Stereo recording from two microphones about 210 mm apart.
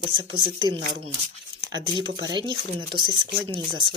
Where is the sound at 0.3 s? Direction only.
25° right (ahead or behind).